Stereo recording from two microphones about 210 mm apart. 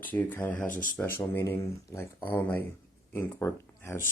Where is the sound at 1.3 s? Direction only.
10° left (ahead or behind).